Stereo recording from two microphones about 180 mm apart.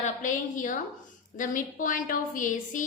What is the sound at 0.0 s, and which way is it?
A woman's voice, 45° left (ahead or behind).